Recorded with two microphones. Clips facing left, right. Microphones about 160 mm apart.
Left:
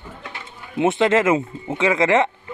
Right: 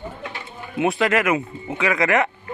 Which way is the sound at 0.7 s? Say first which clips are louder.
Left 3 dB; 25° left (ahead or behind).